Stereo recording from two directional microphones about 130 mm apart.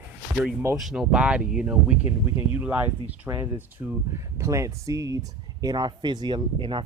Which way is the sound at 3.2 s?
25° right (ahead or behind).